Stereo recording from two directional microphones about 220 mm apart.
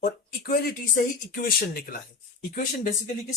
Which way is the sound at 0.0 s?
40° left (ahead or behind).